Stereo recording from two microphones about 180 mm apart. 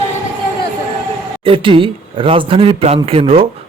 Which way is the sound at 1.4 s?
30° right (ahead or behind).